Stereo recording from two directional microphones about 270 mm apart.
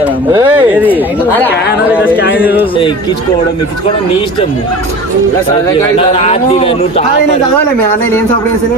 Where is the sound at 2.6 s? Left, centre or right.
Centre.